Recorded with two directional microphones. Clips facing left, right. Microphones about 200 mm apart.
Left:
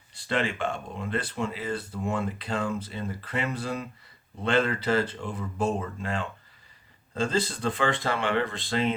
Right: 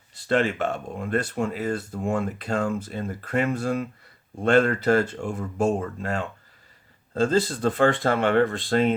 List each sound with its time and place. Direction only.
0.1 s speech: 45° right (ahead or behind)